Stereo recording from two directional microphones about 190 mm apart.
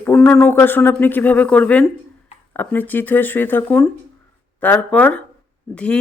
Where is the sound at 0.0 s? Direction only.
10° left (ahead or behind).